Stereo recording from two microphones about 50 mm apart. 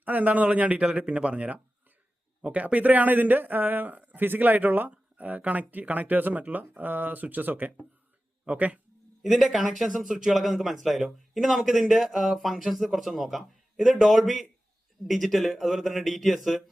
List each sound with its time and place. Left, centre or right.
0.0 s a man's voice: right
9.2 s speech: centre